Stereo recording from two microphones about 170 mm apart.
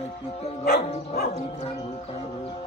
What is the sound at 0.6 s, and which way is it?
Music, 65° left (ahead or behind).